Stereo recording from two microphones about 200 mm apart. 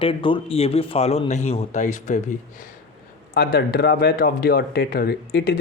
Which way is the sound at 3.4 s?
50° left (ahead or behind).